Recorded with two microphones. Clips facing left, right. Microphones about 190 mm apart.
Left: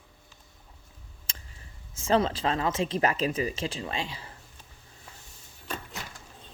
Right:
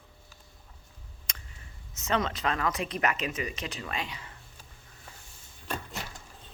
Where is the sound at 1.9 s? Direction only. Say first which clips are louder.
Left 5 dB; 30° left (ahead or behind).